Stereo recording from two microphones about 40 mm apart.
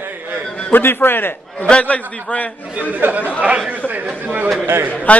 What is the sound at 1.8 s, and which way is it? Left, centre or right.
Speech, left.